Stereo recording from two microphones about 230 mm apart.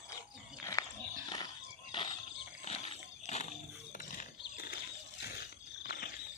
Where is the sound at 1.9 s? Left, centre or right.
Centre.